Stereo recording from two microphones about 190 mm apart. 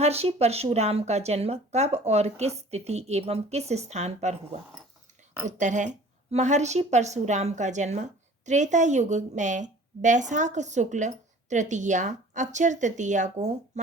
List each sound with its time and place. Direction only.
0.0 s a woman's voice: 35° right (ahead or behind)
5.5 s a woman's voice: 40° right (ahead or behind)